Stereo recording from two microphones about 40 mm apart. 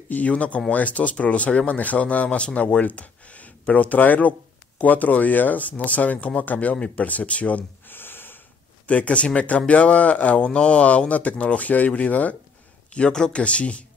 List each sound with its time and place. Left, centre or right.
0.1 s speech: left
7.9 s snort: left
8.8 s speech: left
12.9 s speech: left